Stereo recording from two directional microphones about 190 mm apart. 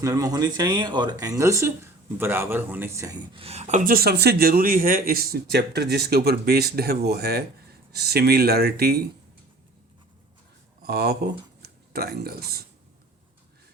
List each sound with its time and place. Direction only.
0.0 s speech: 15° right (ahead or behind); by 9.0 s 55° right (ahead or behind)
10.8 s speech: 55° right (ahead or behind)